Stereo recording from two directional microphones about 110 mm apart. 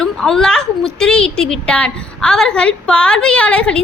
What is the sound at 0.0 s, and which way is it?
Child singing, 5° left (ahead or behind).